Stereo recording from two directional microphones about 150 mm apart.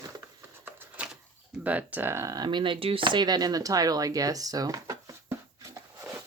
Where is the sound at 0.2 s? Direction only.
15° right (ahead or behind).